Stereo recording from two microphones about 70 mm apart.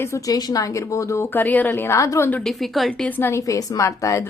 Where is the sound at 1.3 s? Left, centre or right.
Left.